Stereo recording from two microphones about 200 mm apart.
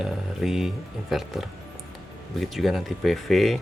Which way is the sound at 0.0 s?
Centre (ahead or behind).